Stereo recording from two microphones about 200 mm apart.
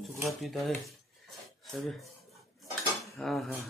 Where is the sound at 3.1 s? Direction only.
Centre (ahead or behind).